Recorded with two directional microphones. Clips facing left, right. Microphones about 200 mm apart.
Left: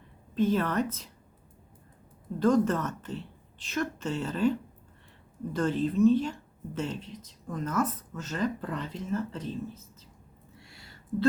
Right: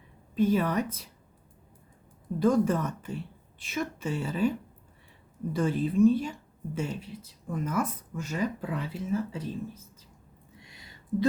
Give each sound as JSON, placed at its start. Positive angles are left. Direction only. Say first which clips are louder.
{"t": 0.3, "sound": "speech", "louder": "right 1 dB", "side_deg": -10}
{"t": 2.4, "sound": "speech", "louder": "even", "side_deg": -10}
{"t": 5.5, "sound": "speech", "louder": "right 1 dB", "side_deg": -10}
{"t": 10.6, "sound": "a sound", "louder": "even", "side_deg": -20}